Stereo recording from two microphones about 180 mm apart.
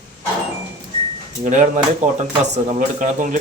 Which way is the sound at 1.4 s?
40° right (ahead or behind).